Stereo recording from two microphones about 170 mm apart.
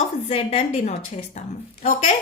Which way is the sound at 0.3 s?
35° left (ahead or behind).